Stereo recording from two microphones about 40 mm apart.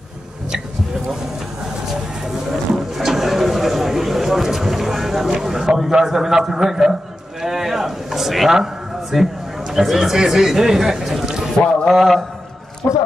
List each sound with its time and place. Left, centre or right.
2.2 s a sound: centre
5.8 s a man's voice: centre
7.4 s a sound: centre
9.1 s a man's voice: centre
11.6 s a man's voice: left
11.9 s a man's voice: centre